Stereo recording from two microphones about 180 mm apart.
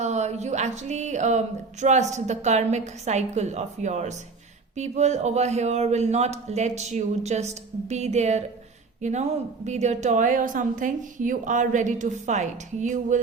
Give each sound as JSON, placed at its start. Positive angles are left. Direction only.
{"t": 0.0, "sound": "a woman's voice", "side_deg": -40}